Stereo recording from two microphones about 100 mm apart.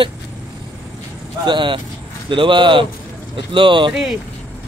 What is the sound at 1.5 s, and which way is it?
Speech, 50° right (ahead or behind).